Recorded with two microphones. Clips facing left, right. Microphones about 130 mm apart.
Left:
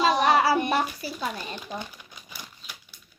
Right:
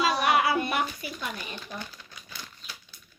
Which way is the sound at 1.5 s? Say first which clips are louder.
Left 3 dB; 15° left (ahead or behind).